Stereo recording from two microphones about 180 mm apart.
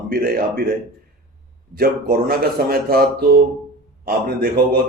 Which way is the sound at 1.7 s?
55° right (ahead or behind).